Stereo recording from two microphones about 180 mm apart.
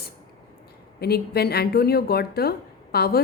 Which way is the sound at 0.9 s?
60° left (ahead or behind).